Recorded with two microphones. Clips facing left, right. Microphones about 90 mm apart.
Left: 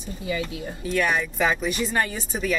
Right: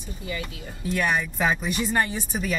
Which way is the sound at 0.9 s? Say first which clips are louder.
Left 2 dB; 5° right (ahead or behind).